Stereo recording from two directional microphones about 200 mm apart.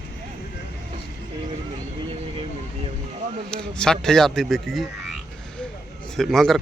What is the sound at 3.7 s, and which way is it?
Speech, 5° left (ahead or behind).